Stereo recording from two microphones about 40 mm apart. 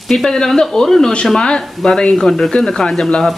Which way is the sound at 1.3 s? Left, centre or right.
Left.